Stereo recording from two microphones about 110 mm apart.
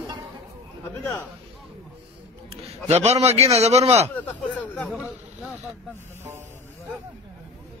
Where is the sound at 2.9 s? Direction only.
80° right.